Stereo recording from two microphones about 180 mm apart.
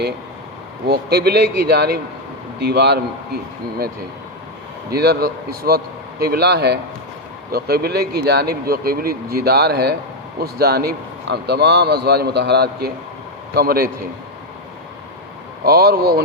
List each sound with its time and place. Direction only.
0.9 s a man's voice: 60° right (ahead or behind)
15.6 s a man's voice: 60° right (ahead or behind)